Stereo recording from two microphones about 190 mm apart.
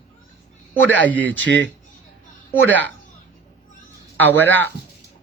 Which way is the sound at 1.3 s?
70° right (ahead or behind).